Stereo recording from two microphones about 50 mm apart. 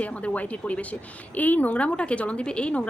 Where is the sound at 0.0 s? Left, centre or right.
Left.